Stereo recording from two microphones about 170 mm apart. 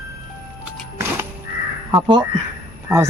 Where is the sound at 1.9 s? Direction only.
25° right (ahead or behind).